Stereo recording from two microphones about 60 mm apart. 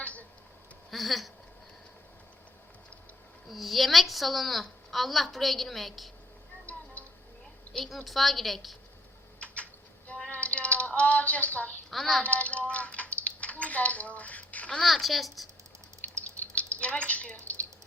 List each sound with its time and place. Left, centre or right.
0.0 s a sound: left
0.9 s a sound: centre
3.5 s a woman's voice: centre
6.7 s music: left
7.7 s a woman's voice: centre
10.2 s a sound: left
11.9 s speech: centre
12.2 s speech: left
14.7 s a woman's voice: centre
16.1 s drip: left
16.6 s a sound: left
17.1 s a woman's voice: left